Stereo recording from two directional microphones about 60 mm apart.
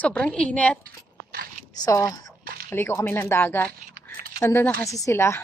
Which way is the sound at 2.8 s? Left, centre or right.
Left.